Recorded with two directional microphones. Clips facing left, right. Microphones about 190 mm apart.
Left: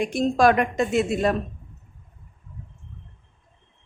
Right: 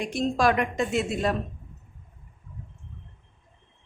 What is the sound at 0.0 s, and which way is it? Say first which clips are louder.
A woman's voice: left 5 dB; 50° left (ahead or behind).